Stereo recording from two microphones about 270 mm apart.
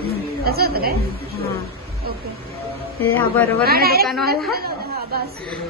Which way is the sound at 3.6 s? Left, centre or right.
Right.